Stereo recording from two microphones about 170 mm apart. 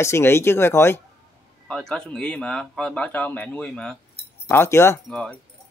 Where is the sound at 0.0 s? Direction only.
15° left (ahead or behind).